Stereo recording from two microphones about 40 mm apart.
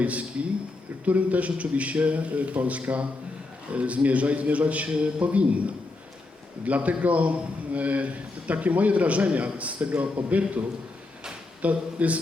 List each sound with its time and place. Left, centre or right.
0.0 s a man's voice: right
11.6 s a man's voice: right